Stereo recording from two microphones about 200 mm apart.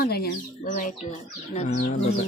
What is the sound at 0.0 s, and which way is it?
Speech, 50° left (ahead or behind).